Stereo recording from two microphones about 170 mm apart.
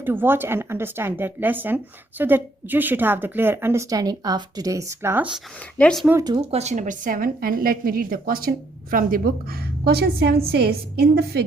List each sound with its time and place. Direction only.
0.0 s a woman's voice: 10° right (ahead or behind)
5.7 s speech: 5° left (ahead or behind)
6.1 s speech: 20° right (ahead or behind)
6.5 s a woman's voice: 40° right (ahead or behind); by 11.4 s 70° right (ahead or behind)